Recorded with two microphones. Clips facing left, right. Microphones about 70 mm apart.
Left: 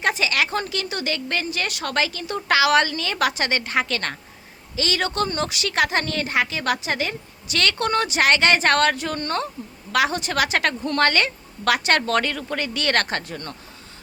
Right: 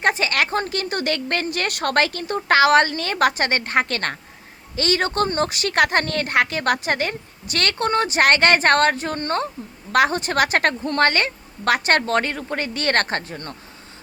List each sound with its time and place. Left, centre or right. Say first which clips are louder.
0.0 s a woman's voice: right 2 dB; right
7.8 s a woman's voice: right 5 dB; right
8.2 s a woman's voice: right 2 dB; right